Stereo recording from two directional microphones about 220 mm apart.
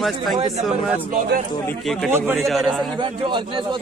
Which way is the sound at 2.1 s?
10° right (ahead or behind).